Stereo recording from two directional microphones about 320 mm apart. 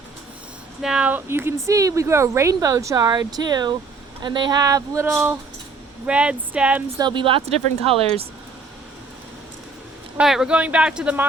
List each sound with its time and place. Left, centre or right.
0.8 s speech: centre
10.2 s speech: centre